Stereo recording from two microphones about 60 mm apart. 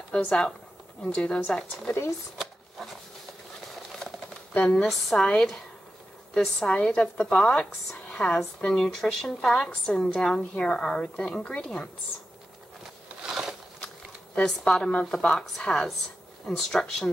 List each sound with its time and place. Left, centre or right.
0.2 s a woman's voice: centre
4.6 s a woman's voice: centre
13.2 s a sound: centre
14.3 s a woman's voice: centre
15.1 s a woman's voice: centre